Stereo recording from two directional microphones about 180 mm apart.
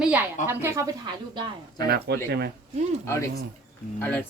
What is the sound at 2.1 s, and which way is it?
Speech, 65° right (ahead or behind).